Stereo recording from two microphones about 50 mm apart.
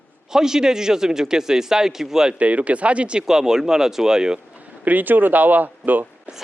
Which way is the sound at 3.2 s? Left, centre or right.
Centre.